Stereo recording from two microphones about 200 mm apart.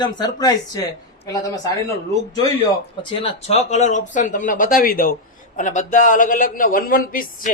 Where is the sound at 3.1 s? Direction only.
30° left (ahead or behind).